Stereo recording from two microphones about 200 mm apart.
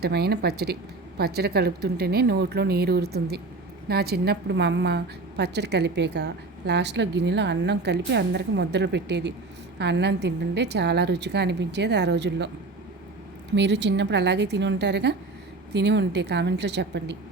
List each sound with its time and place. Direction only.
0.0 s a woman's voice: 50° right (ahead or behind)
13.6 s a woman's voice: 60° right (ahead or behind)